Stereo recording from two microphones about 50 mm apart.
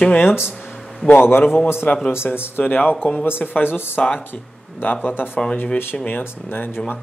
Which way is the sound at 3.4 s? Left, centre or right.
Left.